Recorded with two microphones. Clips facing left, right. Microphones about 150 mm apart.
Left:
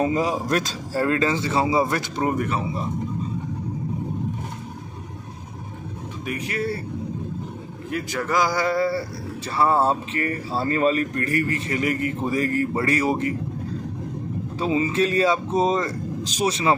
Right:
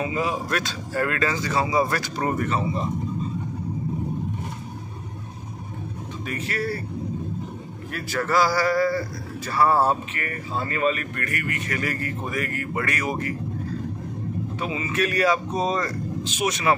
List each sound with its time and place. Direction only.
0.0 s a man's voice: 40° left (ahead or behind)
1.0 s speech: 25° left (ahead or behind)
2.3 s speech: 10° left (ahead or behind)
6.2 s speech: 15° left (ahead or behind)
7.9 s speech: 15° left (ahead or behind)
14.6 s speech: 30° left (ahead or behind)
16.3 s speech: 35° left (ahead or behind)